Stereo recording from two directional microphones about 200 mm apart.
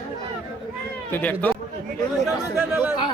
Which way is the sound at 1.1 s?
10° left (ahead or behind).